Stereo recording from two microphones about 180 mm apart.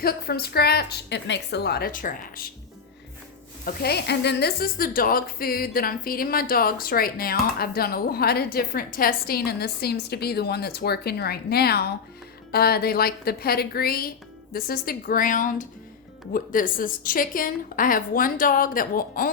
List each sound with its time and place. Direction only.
0.0 s speech: 60° left (ahead or behind)
3.7 s a woman's voice: 60° left (ahead or behind)